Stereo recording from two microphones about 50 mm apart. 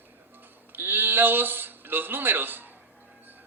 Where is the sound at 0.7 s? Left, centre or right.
Right.